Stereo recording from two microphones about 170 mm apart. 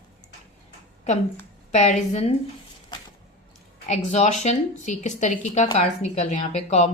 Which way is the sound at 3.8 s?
40° left (ahead or behind).